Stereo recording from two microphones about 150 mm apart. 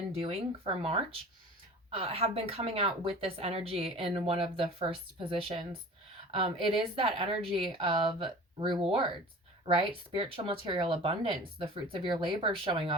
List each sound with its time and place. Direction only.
0.2 s a woman's voice: 40° right (ahead or behind)